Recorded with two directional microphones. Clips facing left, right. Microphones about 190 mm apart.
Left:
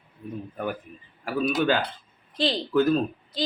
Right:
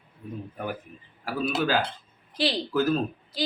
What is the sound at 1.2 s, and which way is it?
Speech, 5° right (ahead or behind).